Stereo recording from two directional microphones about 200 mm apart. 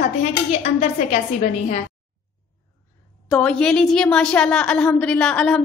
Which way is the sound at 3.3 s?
5° left (ahead or behind).